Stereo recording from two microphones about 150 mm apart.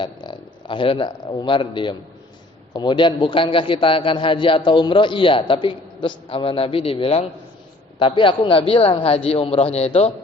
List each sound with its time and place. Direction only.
0.0 s a man's voice: 35° left (ahead or behind)